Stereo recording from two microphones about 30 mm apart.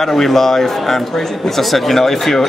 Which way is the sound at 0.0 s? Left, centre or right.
Centre.